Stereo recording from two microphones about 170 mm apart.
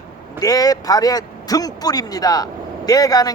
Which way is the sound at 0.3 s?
20° left (ahead or behind).